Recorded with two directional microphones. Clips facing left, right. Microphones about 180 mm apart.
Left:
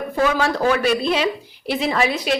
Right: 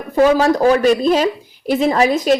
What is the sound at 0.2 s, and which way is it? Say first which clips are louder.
Speech: right 7 dB; 40° right (ahead or behind).